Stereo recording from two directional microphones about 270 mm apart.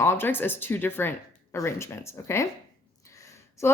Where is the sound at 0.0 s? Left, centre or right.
Centre.